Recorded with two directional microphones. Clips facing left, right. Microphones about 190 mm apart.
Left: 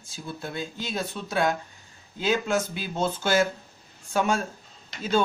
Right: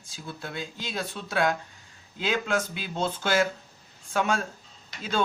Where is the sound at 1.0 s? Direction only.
Centre (ahead or behind).